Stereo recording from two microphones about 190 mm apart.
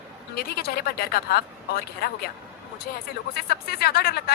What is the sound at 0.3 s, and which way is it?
A woman's voice, 55° left (ahead or behind).